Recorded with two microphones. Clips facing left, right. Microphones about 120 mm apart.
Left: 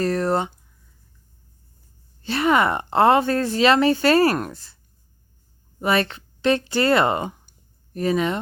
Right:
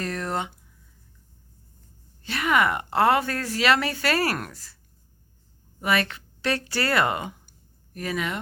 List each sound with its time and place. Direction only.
0.0 s a sound: 35° left (ahead or behind)
2.2 s speech: 30° left (ahead or behind)
5.8 s speech: 30° left (ahead or behind)